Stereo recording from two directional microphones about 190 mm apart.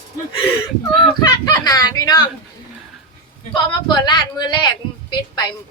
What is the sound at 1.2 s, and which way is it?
A woman's voice, 20° left (ahead or behind).